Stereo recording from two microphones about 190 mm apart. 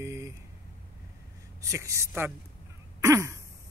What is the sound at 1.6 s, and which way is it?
Speech, 15° right (ahead or behind).